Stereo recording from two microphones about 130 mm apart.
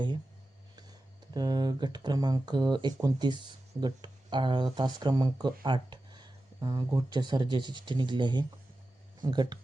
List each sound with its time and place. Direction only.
0.8 s speech: 30° right (ahead or behind)